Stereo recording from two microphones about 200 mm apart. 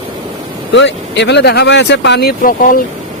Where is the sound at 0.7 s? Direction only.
60° left (ahead or behind); by 2.8 s 45° left (ahead or behind).